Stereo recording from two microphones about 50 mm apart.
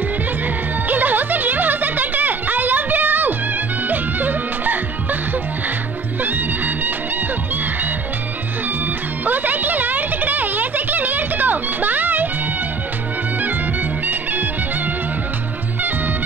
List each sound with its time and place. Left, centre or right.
0.8 s music: right
6.2 s music: right
9.2 s music: right
14.0 s music: right